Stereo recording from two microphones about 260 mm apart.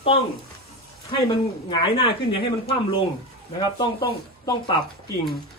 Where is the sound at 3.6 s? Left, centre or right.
Centre.